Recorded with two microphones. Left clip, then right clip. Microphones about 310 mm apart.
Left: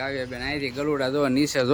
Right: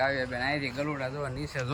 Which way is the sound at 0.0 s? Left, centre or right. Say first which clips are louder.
Right 1 dB; centre.